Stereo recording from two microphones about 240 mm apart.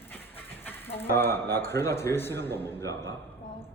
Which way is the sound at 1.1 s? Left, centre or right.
Centre.